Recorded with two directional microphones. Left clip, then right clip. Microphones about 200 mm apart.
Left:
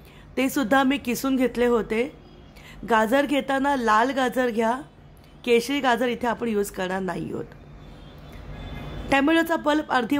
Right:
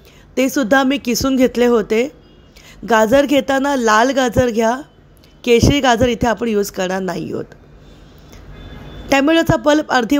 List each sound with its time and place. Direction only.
0.3 s speech: 20° right (ahead or behind)
9.1 s speech: 25° right (ahead or behind)